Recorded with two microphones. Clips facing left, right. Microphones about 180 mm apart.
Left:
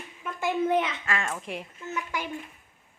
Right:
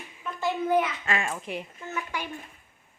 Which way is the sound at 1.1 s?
15° right (ahead or behind).